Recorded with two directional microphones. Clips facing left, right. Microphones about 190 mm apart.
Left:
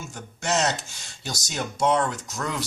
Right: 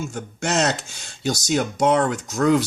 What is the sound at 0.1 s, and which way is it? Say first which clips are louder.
Speech: right 3 dB; 50° right (ahead or behind).